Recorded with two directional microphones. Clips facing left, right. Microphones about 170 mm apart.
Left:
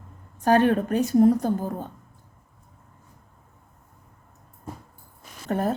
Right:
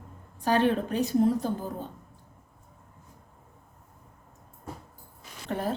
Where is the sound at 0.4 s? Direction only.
50° left (ahead or behind).